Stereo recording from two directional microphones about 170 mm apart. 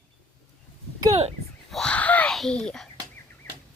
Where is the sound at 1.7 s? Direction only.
5° left (ahead or behind).